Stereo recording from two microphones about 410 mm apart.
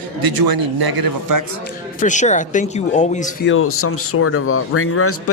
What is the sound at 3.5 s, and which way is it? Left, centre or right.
Speech, left.